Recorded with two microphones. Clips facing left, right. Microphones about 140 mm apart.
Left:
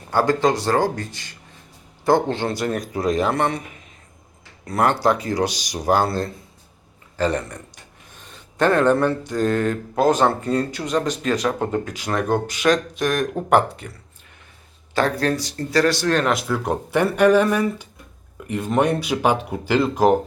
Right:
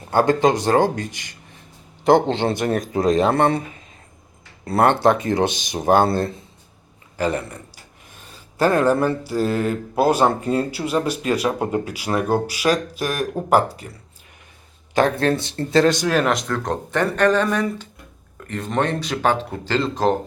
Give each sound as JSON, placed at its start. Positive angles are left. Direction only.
{"t": 0.1, "sound": "speech", "side_deg": -20}
{"t": 4.6, "sound": "speech", "side_deg": -30}
{"t": 7.2, "sound": "speech", "side_deg": -10}
{"t": 14.9, "sound": "speech", "side_deg": -20}
{"t": 16.0, "sound": "speech", "side_deg": -5}